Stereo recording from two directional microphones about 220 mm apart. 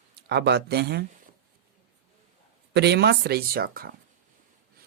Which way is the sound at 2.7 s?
50° right (ahead or behind).